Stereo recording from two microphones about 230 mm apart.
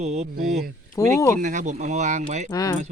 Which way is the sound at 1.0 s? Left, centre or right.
Centre.